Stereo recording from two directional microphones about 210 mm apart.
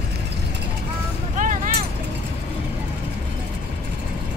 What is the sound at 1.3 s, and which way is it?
Vehicle, 35° right (ahead or behind).